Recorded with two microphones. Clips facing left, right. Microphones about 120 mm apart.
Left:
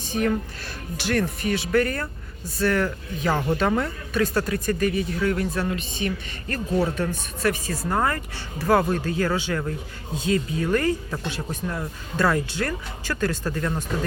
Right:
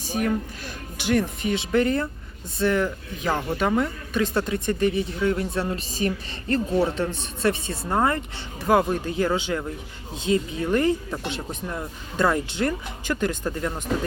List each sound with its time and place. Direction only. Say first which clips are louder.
0.0 s speech: left 1 dB; 10° right (ahead or behind)